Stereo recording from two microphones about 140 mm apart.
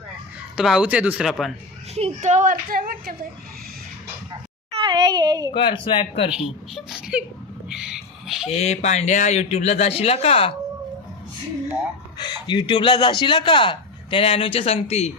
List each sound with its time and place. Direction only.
0.5 s speech: 5° right (ahead or behind)
1.2 s a man's voice: centre (ahead or behind)
2.0 s a woman's voice: 50° right (ahead or behind); by 3.2 s 90° right
4.7 s a child's voice: 35° right (ahead or behind)
5.5 s a man's voice: 35° left (ahead or behind)
6.3 s speech: 5° right (ahead or behind)
7.7 s a sound: 5° right (ahead or behind)
8.4 s speech: 50° left (ahead or behind)
12.1 s a man's voice: 30° left (ahead or behind); by 15.1 s 45° left (ahead or behind)